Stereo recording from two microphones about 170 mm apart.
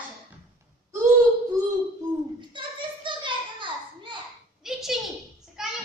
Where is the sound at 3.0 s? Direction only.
30° right (ahead or behind).